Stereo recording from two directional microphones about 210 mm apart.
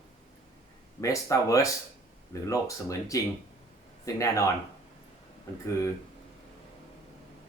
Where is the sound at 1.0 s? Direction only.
15° left (ahead or behind).